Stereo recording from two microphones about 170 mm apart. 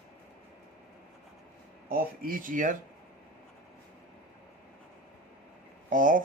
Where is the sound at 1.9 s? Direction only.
60° right (ahead or behind).